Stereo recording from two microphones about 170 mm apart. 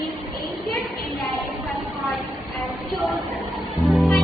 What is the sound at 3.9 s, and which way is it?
Music, centre (ahead or behind).